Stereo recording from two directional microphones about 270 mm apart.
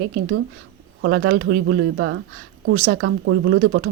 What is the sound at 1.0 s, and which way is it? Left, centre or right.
Speech, right.